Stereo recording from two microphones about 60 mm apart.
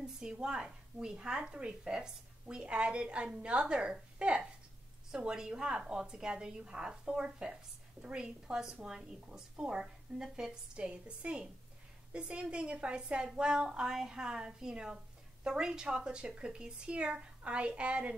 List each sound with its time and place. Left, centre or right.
0.0 s a woman's voice: centre